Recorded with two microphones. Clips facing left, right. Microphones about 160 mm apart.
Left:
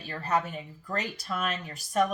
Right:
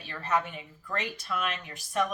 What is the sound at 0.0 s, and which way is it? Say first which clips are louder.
Speech: left 1 dB; 40° left (ahead or behind).